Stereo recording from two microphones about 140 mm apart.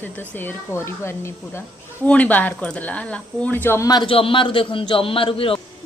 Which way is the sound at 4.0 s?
40° left (ahead or behind).